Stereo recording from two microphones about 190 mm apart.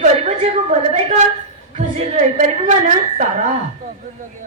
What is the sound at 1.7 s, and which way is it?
A woman's voice, 35° right (ahead or behind).